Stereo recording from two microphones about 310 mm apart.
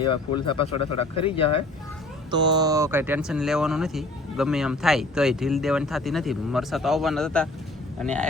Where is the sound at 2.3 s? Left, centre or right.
Centre.